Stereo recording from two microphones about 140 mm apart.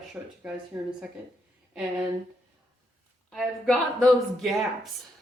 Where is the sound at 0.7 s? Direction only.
20° right (ahead or behind).